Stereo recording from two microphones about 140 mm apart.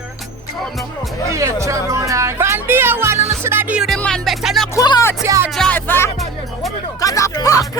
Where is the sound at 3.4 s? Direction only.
15° right (ahead or behind).